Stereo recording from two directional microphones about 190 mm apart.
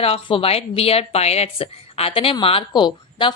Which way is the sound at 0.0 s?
30° left (ahead or behind).